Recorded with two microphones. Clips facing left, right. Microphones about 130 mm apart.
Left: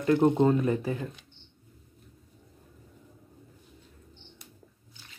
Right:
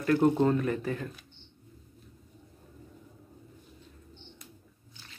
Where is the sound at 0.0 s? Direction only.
20° left (ahead or behind).